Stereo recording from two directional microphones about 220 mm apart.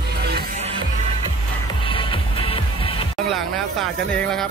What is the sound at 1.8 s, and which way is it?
Music, 25° left (ahead or behind).